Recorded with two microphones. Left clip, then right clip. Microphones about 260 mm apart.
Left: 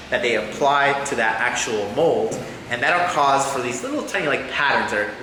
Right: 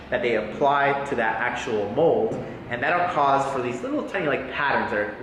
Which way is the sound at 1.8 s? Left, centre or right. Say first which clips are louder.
Even; right.